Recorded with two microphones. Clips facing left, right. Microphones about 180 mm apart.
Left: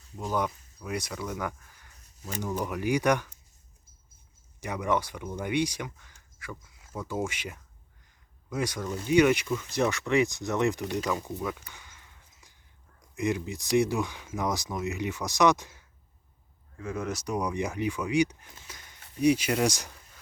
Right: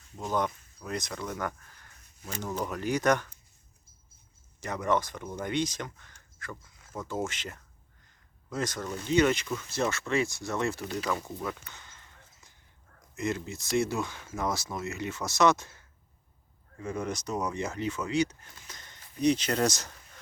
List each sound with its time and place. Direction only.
0.2 s speech: 10° left (ahead or behind)
4.6 s speech: 10° left (ahead or behind)
11.0 s a sound: 5° left (ahead or behind)
13.1 s speech: 15° left (ahead or behind)
16.8 s speech: centre (ahead or behind)